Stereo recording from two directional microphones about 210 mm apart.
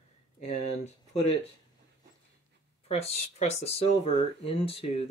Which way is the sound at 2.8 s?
30° left (ahead or behind).